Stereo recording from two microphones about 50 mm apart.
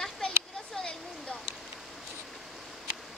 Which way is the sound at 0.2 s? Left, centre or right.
Centre.